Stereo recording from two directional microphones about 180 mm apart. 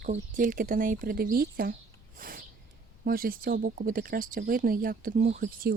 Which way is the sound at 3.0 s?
55° right (ahead or behind).